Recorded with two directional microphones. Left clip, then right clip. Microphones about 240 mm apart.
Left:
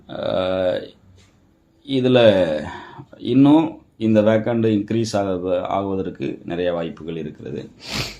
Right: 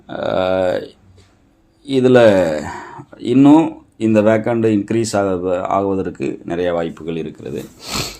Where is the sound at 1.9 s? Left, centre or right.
Right.